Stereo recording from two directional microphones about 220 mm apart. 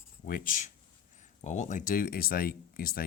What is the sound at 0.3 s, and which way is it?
Speech, 40° left (ahead or behind).